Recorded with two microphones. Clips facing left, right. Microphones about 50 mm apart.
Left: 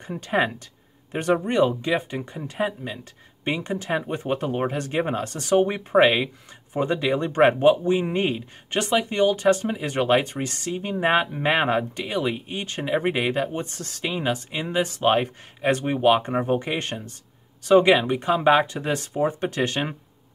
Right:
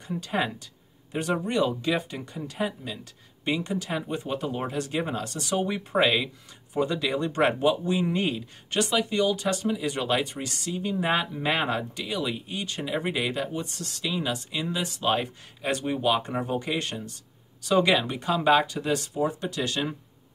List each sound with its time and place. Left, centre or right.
0.0 s speech: left